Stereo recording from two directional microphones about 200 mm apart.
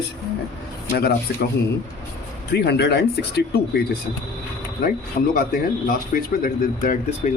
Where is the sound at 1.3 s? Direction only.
55° left (ahead or behind).